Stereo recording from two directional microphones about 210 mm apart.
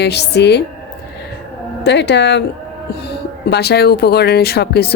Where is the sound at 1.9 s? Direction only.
55° left (ahead or behind).